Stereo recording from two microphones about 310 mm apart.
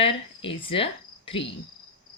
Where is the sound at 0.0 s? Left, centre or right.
Centre.